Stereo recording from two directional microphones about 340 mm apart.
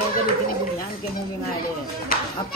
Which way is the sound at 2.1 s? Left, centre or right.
Left.